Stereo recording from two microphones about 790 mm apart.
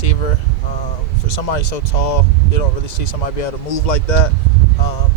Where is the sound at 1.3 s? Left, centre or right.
Left.